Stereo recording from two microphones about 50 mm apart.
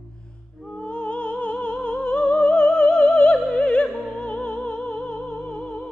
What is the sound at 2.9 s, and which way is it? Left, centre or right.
Opera, centre.